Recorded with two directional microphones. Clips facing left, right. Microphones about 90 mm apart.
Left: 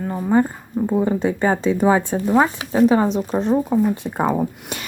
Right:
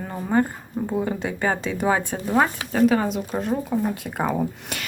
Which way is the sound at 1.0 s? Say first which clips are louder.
Left 6 dB; 25° left (ahead or behind).